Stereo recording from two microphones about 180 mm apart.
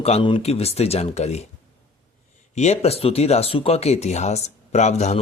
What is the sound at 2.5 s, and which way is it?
Speech, 40° left (ahead or behind).